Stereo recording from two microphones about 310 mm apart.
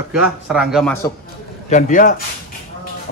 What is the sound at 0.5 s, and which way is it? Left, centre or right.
Speech, centre.